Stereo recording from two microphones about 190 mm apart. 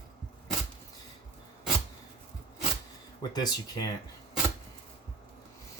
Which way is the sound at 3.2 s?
20° left (ahead or behind).